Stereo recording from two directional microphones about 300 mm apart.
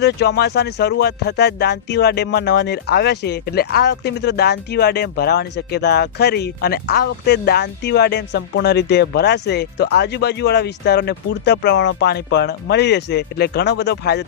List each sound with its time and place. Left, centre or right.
0.0 s speech: left